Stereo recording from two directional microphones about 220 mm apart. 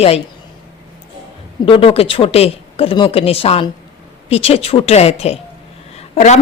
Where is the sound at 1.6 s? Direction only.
25° left (ahead or behind).